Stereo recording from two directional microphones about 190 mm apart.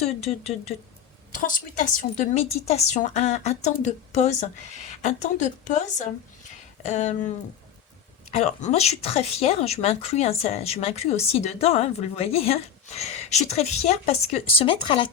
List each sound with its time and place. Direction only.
0.0 s a woman's voice: 35° left (ahead or behind)
1.3 s a woman's voice: 45° left (ahead or behind)
8.3 s a woman's voice: 35° left (ahead or behind)